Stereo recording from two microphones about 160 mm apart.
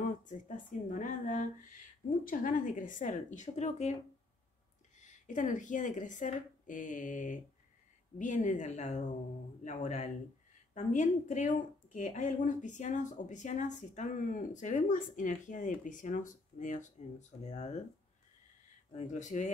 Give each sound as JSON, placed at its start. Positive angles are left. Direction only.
{"t": 0.0, "sound": "a woman's voice", "side_deg": 55}
{"t": 5.0, "sound": "a woman's voice", "side_deg": 50}
{"t": 18.9, "sound": "a woman's voice", "side_deg": 50}